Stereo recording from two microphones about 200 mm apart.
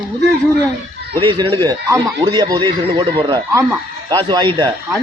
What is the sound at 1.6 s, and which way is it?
Speech, 20° right (ahead or behind).